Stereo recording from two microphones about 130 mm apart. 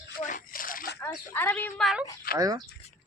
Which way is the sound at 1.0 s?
15° left (ahead or behind).